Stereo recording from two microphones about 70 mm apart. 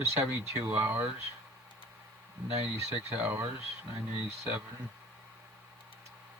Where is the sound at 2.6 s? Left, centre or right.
Right.